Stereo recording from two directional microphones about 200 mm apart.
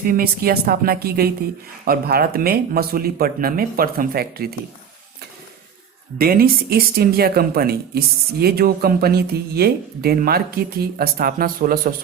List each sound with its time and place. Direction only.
0.0 s speech: 45° right (ahead or behind)
6.1 s speech: 50° right (ahead or behind)